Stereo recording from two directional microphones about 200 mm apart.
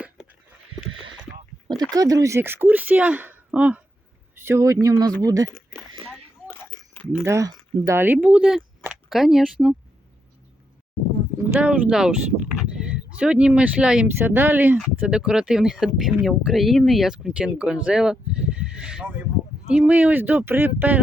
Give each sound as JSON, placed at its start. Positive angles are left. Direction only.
{"t": 1.6, "sound": "speech", "side_deg": -20}
{"t": 6.1, "sound": "biting", "side_deg": 10}
{"t": 7.3, "sound": "speech", "side_deg": -15}
{"t": 11.4, "sound": "speech", "side_deg": -5}